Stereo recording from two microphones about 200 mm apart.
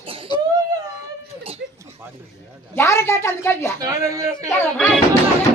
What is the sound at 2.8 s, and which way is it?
Speech, 15° left (ahead or behind).